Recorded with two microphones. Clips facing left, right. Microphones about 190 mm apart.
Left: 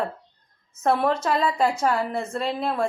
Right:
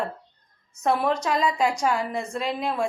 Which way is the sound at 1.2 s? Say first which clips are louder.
Left 1 dB; 15° right (ahead or behind).